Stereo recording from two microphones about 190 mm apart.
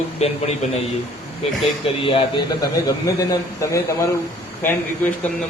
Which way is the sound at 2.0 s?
30° left (ahead or behind).